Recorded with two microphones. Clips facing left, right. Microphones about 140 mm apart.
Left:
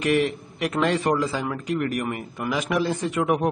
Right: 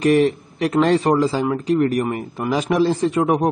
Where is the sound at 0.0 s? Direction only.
35° right (ahead or behind).